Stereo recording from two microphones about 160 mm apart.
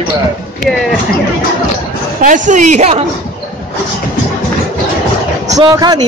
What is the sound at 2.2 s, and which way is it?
Speech, 55° right (ahead or behind).